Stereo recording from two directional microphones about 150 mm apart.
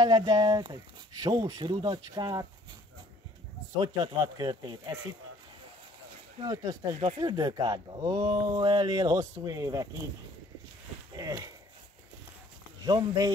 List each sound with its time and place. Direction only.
0.0 s speech: 25° right (ahead or behind)
3.8 s speech: 25° right (ahead or behind)
6.4 s speech: 25° right (ahead or behind)
11.1 s speech: 25° right (ahead or behind)
12.8 s speech: 25° right (ahead or behind)